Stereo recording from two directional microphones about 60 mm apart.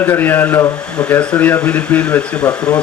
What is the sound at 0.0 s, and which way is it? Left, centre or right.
Speech, left.